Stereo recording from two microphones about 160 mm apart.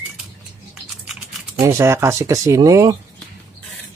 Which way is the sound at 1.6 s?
20° right (ahead or behind).